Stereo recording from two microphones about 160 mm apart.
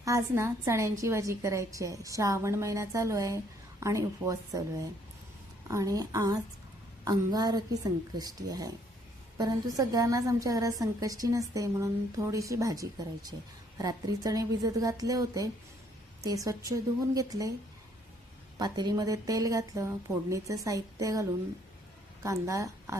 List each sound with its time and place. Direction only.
0.0 s a woman's voice: 20° right (ahead or behind)
18.6 s a woman's voice: 25° right (ahead or behind)